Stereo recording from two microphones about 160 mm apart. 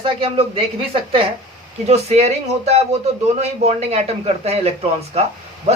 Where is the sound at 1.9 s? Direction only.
40° right (ahead or behind).